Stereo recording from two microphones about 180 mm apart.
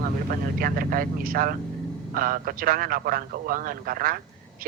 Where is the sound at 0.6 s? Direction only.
50° right (ahead or behind).